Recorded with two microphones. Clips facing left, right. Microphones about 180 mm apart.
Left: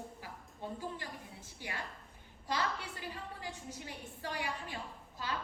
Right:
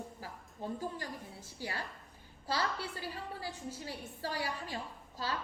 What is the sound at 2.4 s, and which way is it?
A woman's voice, 35° right (ahead or behind).